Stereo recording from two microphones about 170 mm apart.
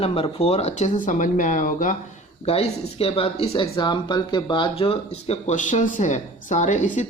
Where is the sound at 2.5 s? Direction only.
35° left (ahead or behind).